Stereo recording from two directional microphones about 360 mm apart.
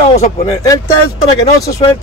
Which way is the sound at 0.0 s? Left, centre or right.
Centre.